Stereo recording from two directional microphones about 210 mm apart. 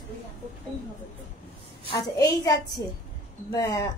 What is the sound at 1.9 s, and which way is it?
A woman's voice, 20° left (ahead or behind).